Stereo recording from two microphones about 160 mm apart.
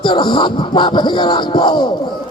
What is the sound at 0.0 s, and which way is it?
A man's voice, 30° left (ahead or behind).